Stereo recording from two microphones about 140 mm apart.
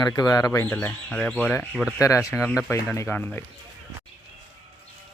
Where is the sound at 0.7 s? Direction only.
10° left (ahead or behind).